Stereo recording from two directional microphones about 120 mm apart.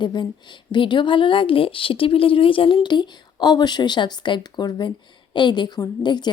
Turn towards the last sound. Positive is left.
turn(degrees=35)  # may be behind; listen again after turning